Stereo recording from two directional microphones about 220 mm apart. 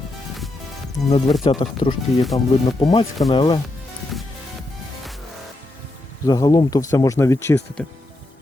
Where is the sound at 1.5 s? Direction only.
25° left (ahead or behind).